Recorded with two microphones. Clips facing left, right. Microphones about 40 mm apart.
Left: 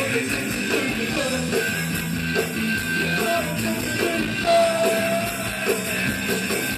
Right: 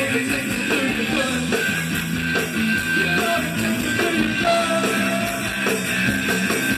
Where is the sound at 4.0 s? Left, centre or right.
Right.